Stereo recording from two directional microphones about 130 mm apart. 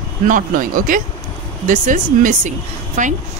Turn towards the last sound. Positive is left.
turn(degrees=-75)  # may be behind; listen again after turning